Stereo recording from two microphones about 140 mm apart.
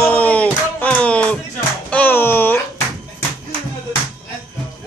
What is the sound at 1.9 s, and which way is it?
Music, 15° left (ahead or behind).